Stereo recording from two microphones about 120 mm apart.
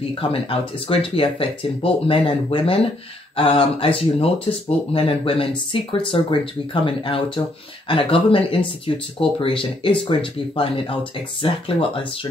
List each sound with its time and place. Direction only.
0.2 s speech: 50° left (ahead or behind)